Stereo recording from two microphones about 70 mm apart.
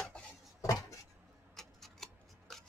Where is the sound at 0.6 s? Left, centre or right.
Left.